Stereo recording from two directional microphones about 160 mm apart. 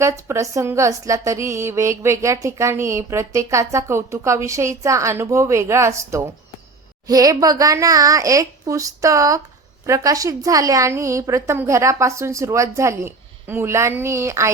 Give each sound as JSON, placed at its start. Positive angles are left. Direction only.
{"t": 0.0, "sound": "a woman's voice", "side_deg": -20}